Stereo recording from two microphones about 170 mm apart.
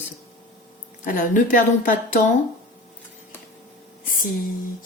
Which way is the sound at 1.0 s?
50° left (ahead or behind).